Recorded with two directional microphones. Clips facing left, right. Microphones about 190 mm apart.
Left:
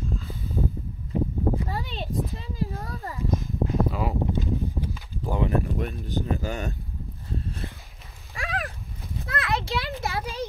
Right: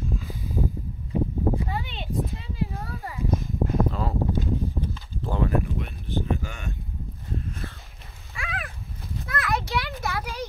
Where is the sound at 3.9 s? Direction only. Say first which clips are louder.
Even; 10° left (ahead or behind).